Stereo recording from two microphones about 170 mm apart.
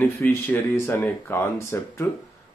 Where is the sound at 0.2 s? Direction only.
10° left (ahead or behind).